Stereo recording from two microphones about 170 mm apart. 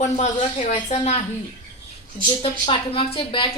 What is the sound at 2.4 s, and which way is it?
Speech, 35° left (ahead or behind).